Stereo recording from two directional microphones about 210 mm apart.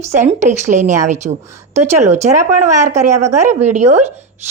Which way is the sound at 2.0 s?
35° right (ahead or behind).